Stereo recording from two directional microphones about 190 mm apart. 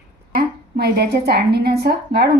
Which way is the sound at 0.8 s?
55° right (ahead or behind).